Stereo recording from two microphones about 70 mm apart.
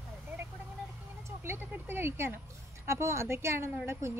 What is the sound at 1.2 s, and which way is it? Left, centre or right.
Speech, right.